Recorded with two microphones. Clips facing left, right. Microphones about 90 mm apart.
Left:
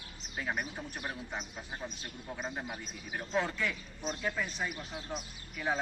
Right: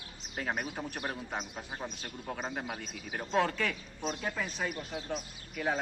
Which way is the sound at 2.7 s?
90° right.